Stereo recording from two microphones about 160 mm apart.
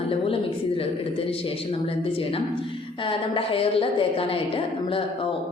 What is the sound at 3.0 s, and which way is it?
A woman's voice, 35° left (ahead or behind).